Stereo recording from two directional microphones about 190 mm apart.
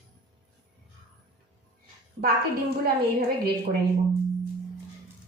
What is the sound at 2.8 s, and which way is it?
Speech, 55° right (ahead or behind).